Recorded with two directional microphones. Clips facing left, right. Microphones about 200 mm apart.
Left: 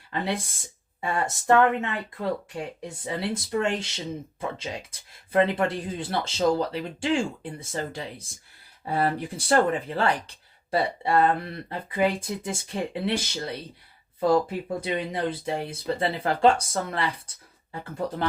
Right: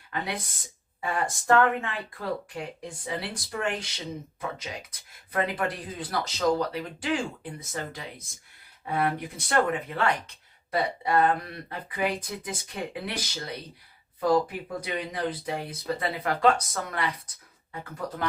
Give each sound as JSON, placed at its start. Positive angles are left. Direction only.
{"t": 0.1, "sound": "speech", "side_deg": 25}